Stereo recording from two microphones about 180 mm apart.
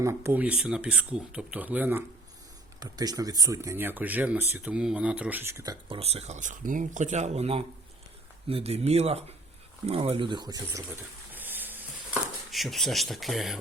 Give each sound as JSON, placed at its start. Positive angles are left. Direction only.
{"t": 0.0, "sound": "speech", "side_deg": -15}
{"t": 2.8, "sound": "speech", "side_deg": -20}
{"t": 5.9, "sound": "speech", "side_deg": -35}
{"t": 11.3, "sound": "a sound", "side_deg": -10}
{"t": 12.5, "sound": "speech", "side_deg": 0}